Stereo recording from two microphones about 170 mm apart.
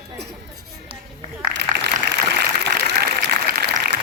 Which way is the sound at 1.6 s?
80° right.